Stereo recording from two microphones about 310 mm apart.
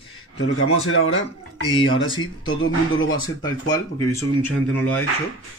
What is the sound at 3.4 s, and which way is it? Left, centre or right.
Speech, centre.